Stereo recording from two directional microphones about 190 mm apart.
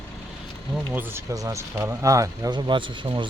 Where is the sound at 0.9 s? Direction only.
10° right (ahead or behind).